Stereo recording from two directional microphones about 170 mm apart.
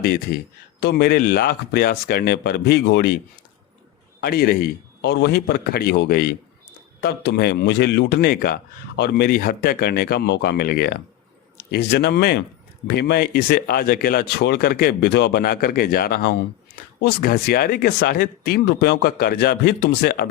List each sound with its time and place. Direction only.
0.0 s speech: 65° left (ahead or behind)
0.8 s speech: 75° left (ahead or behind)
4.2 s speech: 60° left (ahead or behind)
17.0 s speech: 75° left (ahead or behind)